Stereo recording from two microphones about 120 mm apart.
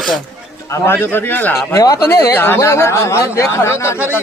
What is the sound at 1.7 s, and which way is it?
Speech, 30° left (ahead or behind).